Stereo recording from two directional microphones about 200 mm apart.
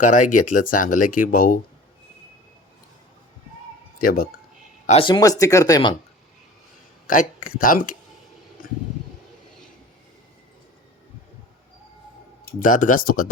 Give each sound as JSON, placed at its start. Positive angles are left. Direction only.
{"t": 0.0, "sound": "speech", "side_deg": 40}
{"t": 3.9, "sound": "speech", "side_deg": 45}
{"t": 4.9, "sound": "speech", "side_deg": 25}
{"t": 7.1, "sound": "speech", "side_deg": 45}
{"t": 12.5, "sound": "speech", "side_deg": 40}